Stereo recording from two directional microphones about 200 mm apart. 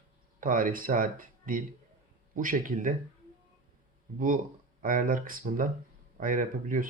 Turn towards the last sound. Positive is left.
turn(degrees=-40)  # may be behind; listen again after turning